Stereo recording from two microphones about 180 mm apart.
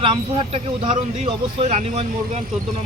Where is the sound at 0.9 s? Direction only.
40° right (ahead or behind).